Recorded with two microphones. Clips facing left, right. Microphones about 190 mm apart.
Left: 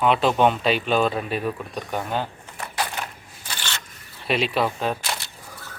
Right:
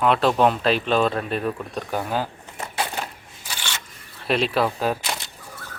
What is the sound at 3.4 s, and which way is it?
Scissors, 10° right (ahead or behind).